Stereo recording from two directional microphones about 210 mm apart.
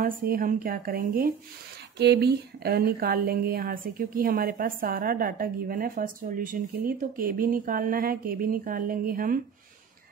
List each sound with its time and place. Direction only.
0.0 s speech: 40° right (ahead or behind)